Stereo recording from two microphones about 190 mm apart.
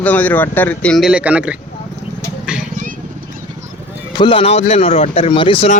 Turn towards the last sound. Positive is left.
turn(degrees=30)  # may be behind; listen again after turning